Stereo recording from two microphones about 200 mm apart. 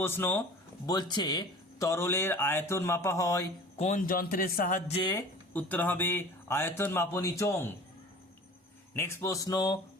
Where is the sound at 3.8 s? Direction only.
40° left (ahead or behind).